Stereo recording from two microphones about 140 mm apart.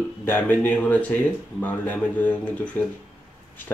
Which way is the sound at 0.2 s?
15° left (ahead or behind).